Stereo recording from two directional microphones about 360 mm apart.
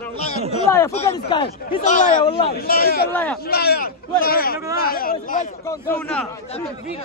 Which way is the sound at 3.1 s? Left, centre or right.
Centre.